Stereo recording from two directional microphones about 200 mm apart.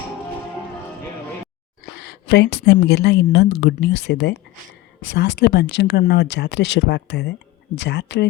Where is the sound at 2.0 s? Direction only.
55° left (ahead or behind).